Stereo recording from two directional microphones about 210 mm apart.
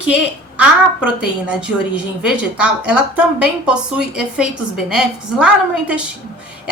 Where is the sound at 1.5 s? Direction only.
5° right (ahead or behind).